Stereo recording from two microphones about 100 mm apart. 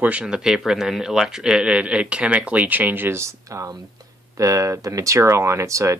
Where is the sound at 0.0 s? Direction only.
10° right (ahead or behind).